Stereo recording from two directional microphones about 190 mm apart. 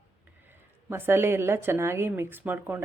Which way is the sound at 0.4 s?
10° right (ahead or behind).